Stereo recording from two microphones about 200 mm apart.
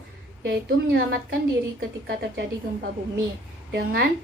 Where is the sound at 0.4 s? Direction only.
60° right (ahead or behind).